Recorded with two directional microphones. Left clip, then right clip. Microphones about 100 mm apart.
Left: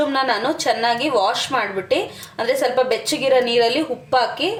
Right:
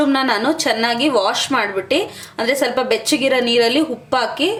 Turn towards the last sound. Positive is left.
turn(degrees=-55)  # may be behind; listen again after turning